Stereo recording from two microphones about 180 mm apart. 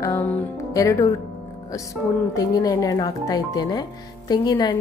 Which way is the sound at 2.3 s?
20° left (ahead or behind).